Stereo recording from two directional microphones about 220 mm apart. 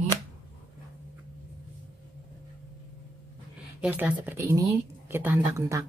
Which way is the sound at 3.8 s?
10° right (ahead or behind).